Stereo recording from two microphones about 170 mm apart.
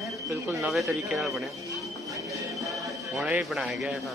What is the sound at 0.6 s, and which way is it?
Speech, centre (ahead or behind).